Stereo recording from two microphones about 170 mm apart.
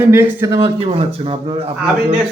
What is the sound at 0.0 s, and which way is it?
Speech, 15° right (ahead or behind).